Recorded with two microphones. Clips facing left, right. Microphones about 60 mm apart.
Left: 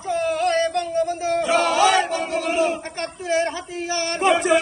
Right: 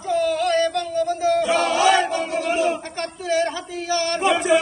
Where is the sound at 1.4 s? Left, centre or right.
Centre.